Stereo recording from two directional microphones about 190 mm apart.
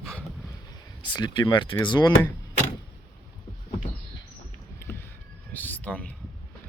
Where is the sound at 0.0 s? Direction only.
5° left (ahead or behind).